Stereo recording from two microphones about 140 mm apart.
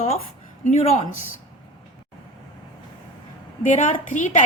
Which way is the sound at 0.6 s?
55° left (ahead or behind).